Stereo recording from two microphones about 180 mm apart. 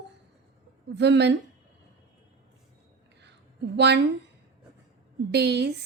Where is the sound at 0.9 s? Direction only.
70° right (ahead or behind).